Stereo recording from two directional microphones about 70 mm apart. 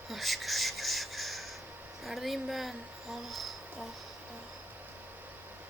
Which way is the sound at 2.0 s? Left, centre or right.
Centre.